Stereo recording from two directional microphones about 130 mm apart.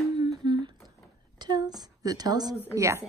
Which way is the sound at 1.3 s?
30° right (ahead or behind).